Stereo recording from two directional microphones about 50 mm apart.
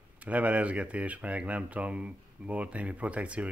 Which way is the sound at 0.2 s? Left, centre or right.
Right.